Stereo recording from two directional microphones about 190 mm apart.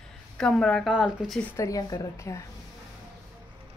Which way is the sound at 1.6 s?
20° left (ahead or behind).